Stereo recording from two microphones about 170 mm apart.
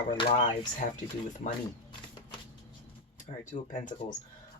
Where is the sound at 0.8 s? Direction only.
45° left (ahead or behind).